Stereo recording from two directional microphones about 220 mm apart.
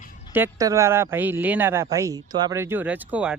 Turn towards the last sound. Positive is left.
turn(degrees=-5)  # may be behind; listen again after turning